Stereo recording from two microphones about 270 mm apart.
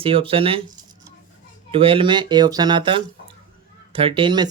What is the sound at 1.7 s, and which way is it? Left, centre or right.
Speech, centre.